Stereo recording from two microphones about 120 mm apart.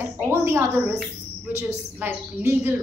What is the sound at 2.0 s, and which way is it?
Speech, 20° right (ahead or behind).